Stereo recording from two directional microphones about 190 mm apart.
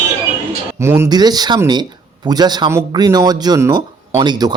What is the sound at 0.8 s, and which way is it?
Speech, 15° right (ahead or behind).